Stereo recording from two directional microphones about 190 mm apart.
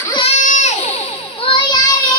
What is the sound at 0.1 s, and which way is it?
Baby cry, 30° left (ahead or behind).